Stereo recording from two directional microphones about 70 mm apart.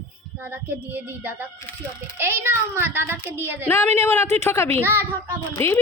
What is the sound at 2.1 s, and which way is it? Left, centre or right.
A child's voice, right.